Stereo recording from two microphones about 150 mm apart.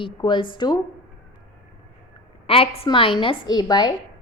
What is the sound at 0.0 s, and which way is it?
Speech, 30° left (ahead or behind).